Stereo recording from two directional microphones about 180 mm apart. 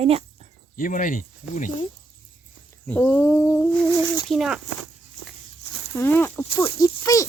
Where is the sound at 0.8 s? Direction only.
50° left (ahead or behind).